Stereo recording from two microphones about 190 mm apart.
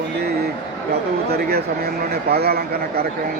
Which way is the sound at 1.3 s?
55° right (ahead or behind).